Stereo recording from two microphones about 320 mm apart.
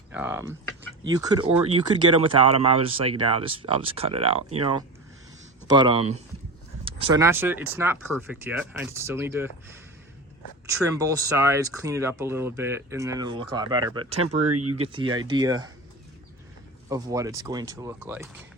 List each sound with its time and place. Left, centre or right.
0.1 s speech: centre
14.5 s speech: right
15.3 s speech: centre
16.9 s speech: centre